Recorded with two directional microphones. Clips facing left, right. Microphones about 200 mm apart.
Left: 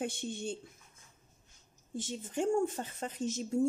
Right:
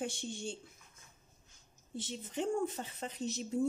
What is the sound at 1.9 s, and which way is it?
Speech, 45° left (ahead or behind).